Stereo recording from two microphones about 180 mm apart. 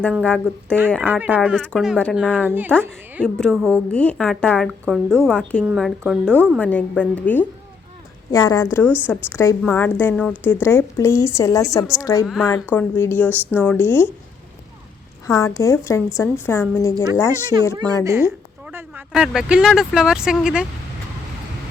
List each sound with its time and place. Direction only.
0.2 s a woman's voice: 5° left (ahead or behind)
1.0 s speech: 10° right (ahead or behind)
1.5 s a woman's voice: 5° left (ahead or behind)
3.2 s a woman's voice: 5° left (ahead or behind)
8.3 s a woman's voice: 20° left (ahead or behind)
12.2 s a woman's voice: centre (ahead or behind)
12.7 s a woman's voice: 10° left (ahead or behind)
15.3 s a woman's voice: 15° left (ahead or behind)
17.7 s speech: 20° right (ahead or behind); by 20.7 s 5° right (ahead or behind)